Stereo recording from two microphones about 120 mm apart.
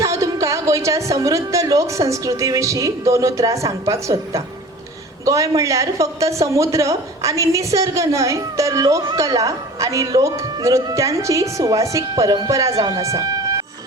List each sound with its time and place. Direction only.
0.0 s speech: 25° right (ahead or behind)